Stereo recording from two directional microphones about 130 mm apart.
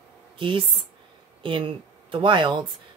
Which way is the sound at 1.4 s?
40° right (ahead or behind).